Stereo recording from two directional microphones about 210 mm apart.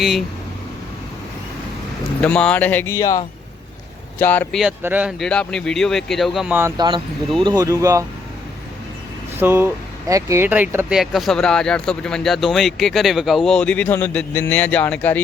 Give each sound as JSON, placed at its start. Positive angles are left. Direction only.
{"t": 0.0, "sound": "speech", "side_deg": 0}
{"t": 2.2, "sound": "speech", "side_deg": 5}
{"t": 4.6, "sound": "speech", "side_deg": -10}
{"t": 5.2, "sound": "speech", "side_deg": 5}
{"t": 9.4, "sound": "speech", "side_deg": -10}